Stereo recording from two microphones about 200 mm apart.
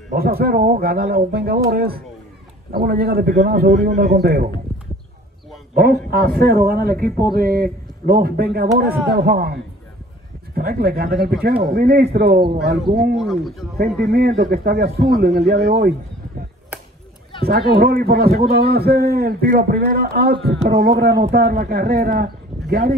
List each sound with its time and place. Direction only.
0.1 s a man's voice: 50° right (ahead or behind)
5.8 s a man's voice: 50° right (ahead or behind)
13.2 s speech: centre (ahead or behind)
13.7 s a man's voice: 55° right (ahead or behind)
17.4 s a man's voice: 50° right (ahead or behind)